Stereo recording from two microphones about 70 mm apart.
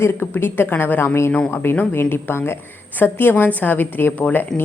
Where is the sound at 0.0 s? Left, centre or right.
Left.